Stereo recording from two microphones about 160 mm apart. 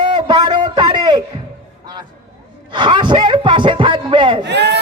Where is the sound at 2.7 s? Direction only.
30° right (ahead or behind).